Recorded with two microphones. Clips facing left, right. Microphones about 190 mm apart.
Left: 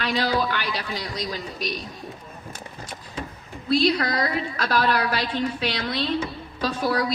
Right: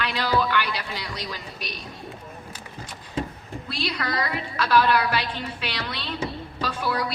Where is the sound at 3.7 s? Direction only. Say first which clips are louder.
Left 8 dB; 40° left (ahead or behind).